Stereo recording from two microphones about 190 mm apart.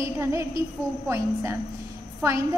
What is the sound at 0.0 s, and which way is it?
A woman's voice, 15° right (ahead or behind).